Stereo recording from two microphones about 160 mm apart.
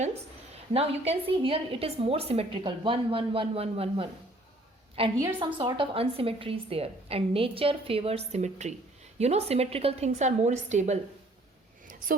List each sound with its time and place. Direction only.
0.7 s a woman's voice: 40° right (ahead or behind)